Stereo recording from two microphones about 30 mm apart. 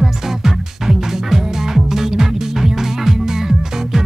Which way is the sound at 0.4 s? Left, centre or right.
Centre.